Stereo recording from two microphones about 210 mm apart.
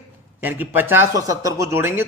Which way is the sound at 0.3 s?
10° right (ahead or behind).